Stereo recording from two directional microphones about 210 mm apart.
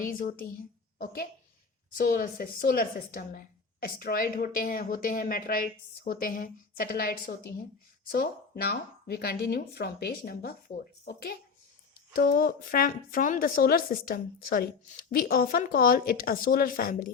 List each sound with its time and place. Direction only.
0.0 s speech: 40° left (ahead or behind)
10.7 s speech: 35° left (ahead or behind)